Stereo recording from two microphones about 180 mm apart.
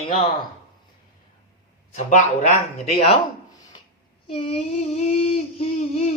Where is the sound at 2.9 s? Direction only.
30° left (ahead or behind).